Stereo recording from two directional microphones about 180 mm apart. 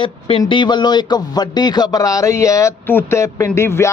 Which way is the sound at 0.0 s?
30° left (ahead or behind).